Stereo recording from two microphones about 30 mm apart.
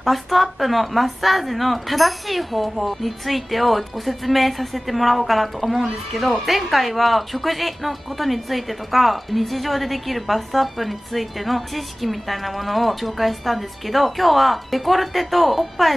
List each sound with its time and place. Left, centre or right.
0.0 s speech: centre